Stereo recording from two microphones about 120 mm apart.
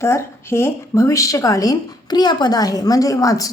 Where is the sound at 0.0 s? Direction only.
20° left (ahead or behind).